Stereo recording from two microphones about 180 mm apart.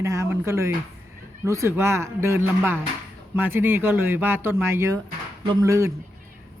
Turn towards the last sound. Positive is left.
turn(degrees=-15)  # may be behind; listen again after turning